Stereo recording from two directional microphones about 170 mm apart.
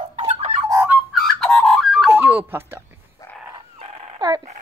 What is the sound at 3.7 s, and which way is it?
Dog, 35° right (ahead or behind).